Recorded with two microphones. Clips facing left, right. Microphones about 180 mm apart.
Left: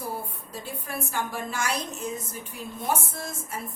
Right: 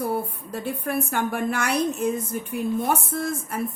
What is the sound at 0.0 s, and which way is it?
A woman's voice, 60° right (ahead or behind).